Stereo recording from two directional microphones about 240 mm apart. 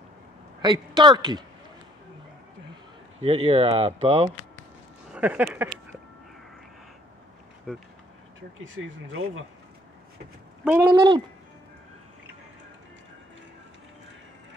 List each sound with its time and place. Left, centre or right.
0.6 s speech: centre
3.2 s speech: right
5.1 s speech: centre
7.7 s speech: centre
8.6 s speech: right
10.6 s speech: centre